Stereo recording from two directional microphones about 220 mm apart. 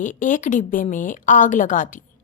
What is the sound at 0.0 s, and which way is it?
A woman's voice, 35° left (ahead or behind).